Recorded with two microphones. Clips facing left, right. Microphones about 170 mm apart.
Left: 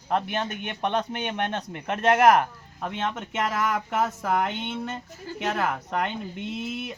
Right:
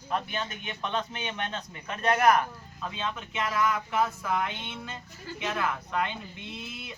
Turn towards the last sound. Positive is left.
turn(degrees=65)  # may be behind; listen again after turning